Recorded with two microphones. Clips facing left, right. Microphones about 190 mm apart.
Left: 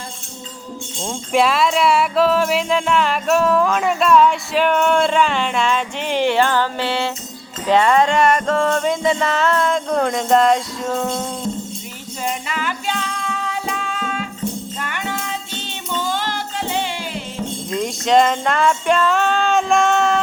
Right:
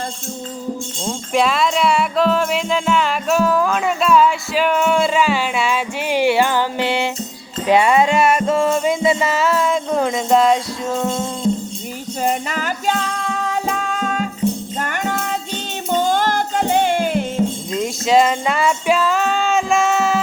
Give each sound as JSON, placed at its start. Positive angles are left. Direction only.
{"t": 1.0, "sound": "music", "side_deg": 0}
{"t": 12.2, "sound": "music", "side_deg": -40}
{"t": 17.7, "sound": "music", "side_deg": -5}